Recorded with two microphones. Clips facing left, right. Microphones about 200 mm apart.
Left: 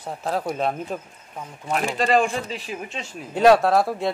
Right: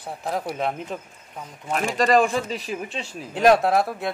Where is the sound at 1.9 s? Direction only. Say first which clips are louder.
Right 3 dB; 40° right (ahead or behind).